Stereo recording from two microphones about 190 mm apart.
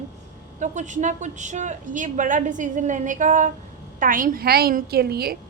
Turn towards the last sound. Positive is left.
turn(degrees=-55)  # may be behind; listen again after turning